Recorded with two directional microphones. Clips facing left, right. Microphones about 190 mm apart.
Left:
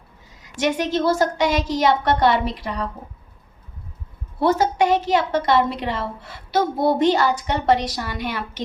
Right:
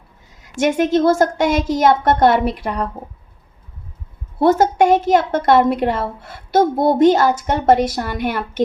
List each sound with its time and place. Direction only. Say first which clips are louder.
0.5 s a woman's voice: right 6 dB; 50° right (ahead or behind)
4.4 s a woman's voice: right 5 dB; 50° right (ahead or behind)